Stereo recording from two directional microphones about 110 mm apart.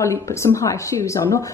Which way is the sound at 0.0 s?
25° left (ahead or behind).